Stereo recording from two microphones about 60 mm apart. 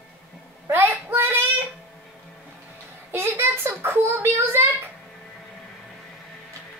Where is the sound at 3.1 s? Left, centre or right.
Right.